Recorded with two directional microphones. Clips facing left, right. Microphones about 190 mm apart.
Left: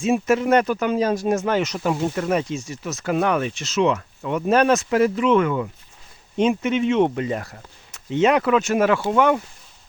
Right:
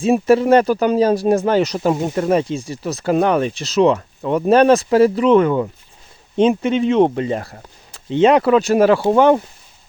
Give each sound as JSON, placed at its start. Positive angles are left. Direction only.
{"t": 0.0, "sound": "speech", "side_deg": -35}